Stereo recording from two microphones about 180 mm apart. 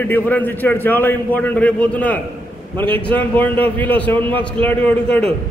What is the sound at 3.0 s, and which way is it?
A man's voice, 10° left (ahead or behind).